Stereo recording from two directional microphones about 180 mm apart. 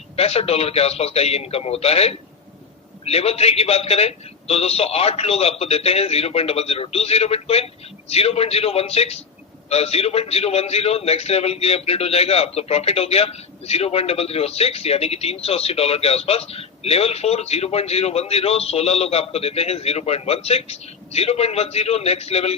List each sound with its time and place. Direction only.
0.2 s a man's voice: 35° left (ahead or behind)